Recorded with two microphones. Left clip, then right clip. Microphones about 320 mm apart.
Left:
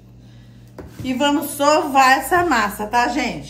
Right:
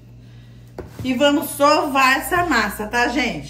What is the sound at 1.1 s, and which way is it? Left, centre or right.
A woman's voice, centre.